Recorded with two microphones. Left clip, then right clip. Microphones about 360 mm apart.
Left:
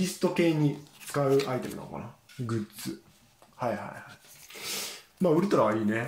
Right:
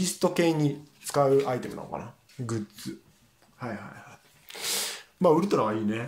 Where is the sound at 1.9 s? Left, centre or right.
Right.